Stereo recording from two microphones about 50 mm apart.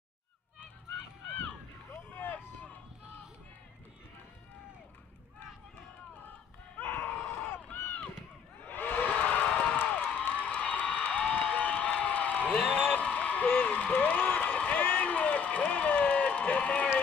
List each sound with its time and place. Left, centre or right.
2.0 s vehicle: left
6.8 s screaming: left
7.7 s run: left
8.5 s crowd: left
12.0 s a sound: left
13.5 s a sound: left